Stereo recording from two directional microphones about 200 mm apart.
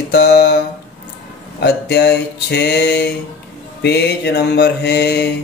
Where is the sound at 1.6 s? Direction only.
55° left (ahead or behind).